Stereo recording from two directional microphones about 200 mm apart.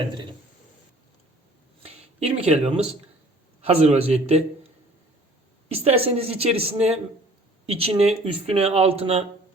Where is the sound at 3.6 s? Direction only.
30° right (ahead or behind).